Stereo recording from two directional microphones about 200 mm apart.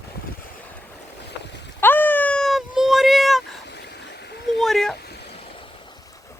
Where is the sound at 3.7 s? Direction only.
55° left (ahead or behind).